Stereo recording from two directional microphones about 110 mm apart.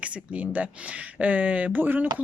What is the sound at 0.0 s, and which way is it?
A woman's voice, 15° right (ahead or behind).